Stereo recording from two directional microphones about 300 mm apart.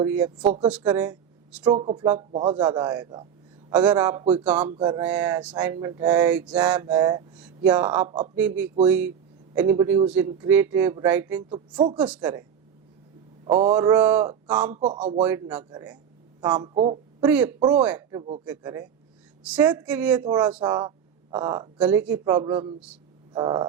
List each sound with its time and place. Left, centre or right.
0.0 s speech: centre
4.2 s speech: centre
4.4 s speech: centre
8.0 s speech: right
8.4 s a woman's voice: centre
17.2 s speech: centre
18.2 s speech: right
18.4 s speech: centre